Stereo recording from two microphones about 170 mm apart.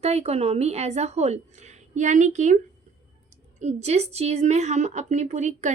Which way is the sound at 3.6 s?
40° right (ahead or behind).